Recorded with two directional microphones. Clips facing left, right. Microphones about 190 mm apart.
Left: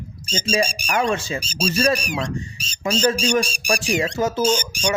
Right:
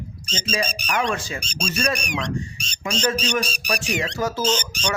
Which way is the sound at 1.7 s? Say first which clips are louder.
Left 4 dB; 30° left (ahead or behind).